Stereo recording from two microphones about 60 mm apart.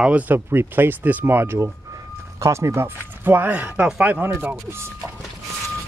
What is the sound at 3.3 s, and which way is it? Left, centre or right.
Speech, right.